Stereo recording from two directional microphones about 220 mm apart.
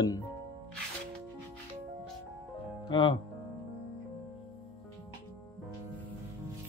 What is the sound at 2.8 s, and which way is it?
Speech, 20° left (ahead or behind).